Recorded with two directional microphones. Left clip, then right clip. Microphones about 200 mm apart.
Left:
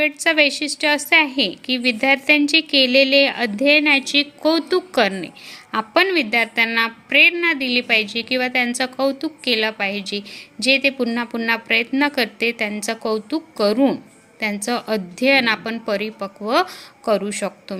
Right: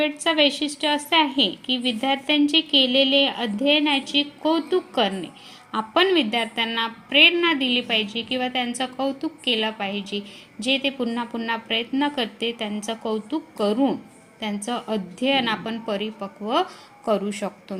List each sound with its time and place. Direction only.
0.0 s a woman's voice: 35° left (ahead or behind)